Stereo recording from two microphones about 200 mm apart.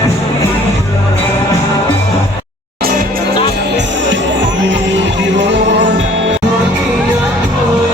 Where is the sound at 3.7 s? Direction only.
65° right (ahead or behind).